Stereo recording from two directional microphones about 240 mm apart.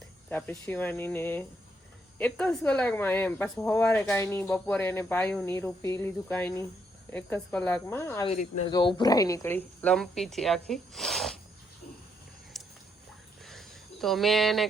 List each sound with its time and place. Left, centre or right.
0.3 s speech: centre
8.3 s speech: left
8.7 s speech: centre
12.5 s a sound: centre